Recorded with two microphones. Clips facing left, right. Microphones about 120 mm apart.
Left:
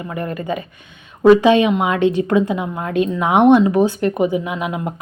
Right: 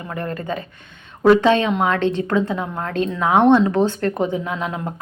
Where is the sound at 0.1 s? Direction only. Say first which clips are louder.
Left 2 dB; 10° left (ahead or behind).